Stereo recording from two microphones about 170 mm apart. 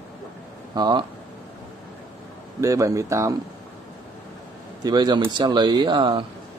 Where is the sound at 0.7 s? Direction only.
25° right (ahead or behind).